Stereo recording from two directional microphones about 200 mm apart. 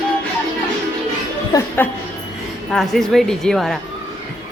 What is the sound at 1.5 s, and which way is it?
Speech, 20° left (ahead or behind).